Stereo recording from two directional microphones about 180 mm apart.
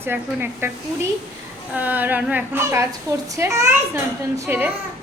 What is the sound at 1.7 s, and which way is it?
A woman's voice, 10° right (ahead or behind).